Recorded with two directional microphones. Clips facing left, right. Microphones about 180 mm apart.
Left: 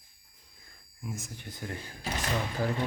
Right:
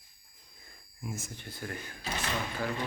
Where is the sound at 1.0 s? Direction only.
5° right (ahead or behind).